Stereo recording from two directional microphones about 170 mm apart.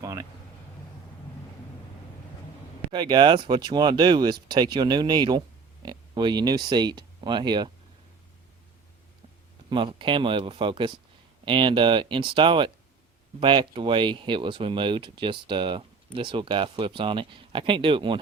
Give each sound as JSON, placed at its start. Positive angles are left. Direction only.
{"t": 0.0, "sound": "vehicle", "side_deg": -20}
{"t": 2.9, "sound": "speech", "side_deg": -25}
{"t": 9.6, "sound": "speech", "side_deg": -30}